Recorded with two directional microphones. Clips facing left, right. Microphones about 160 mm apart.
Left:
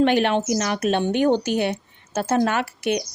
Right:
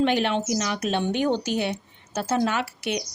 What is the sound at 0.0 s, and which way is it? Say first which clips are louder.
A woman's voice: left 4 dB; 55° left (ahead or behind).